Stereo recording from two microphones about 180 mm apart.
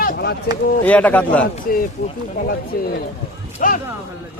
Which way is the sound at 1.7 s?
50° left (ahead or behind).